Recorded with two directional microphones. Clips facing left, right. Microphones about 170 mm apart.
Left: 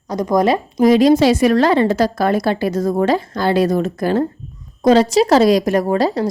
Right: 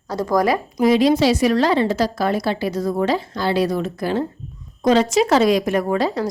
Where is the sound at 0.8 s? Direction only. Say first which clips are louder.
Left 4 dB; 40° left (ahead or behind).